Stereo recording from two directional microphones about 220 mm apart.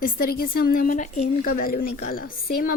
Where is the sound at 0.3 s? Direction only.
40° left (ahead or behind).